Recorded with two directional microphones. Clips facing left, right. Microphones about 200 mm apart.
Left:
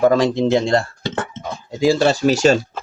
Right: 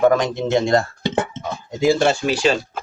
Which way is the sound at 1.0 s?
15° right (ahead or behind).